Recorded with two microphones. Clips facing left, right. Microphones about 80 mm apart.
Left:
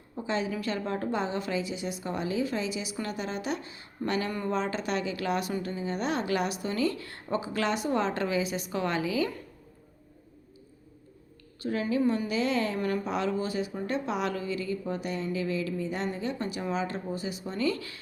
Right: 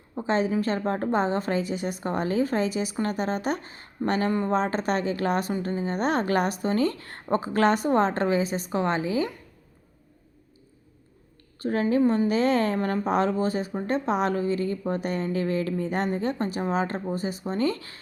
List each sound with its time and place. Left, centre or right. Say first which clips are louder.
0.3 s a woman's voice: right 6 dB; right
4.3 s speech: right 6 dB; right
4.5 s a woman's voice: right 5 dB; right
11.6 s a woman's voice: right 5 dB; right